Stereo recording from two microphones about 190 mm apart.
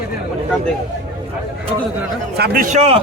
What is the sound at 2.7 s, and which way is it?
Speech, 30° right (ahead or behind).